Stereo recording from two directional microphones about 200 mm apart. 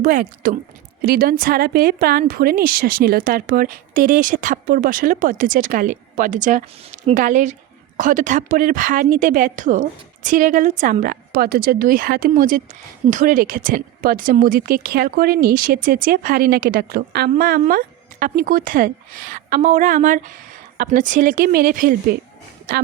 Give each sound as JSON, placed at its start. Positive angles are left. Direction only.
{"t": 0.0, "sound": "a woman's voice", "side_deg": -45}